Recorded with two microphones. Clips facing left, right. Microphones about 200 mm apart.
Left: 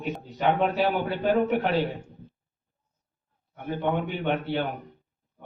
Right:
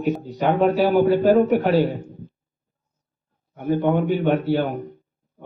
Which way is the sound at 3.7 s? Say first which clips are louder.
Right 8 dB; 45° right (ahead or behind).